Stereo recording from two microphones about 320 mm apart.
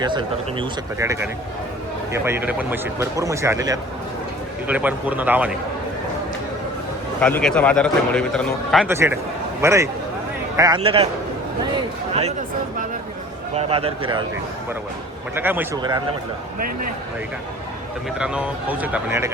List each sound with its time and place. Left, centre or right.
0.0 s a man's voice: centre
7.2 s a man's voice: centre
13.6 s a man's voice: centre
15.4 s a man's voice: centre
16.6 s speech: right
18.2 s a man's voice: centre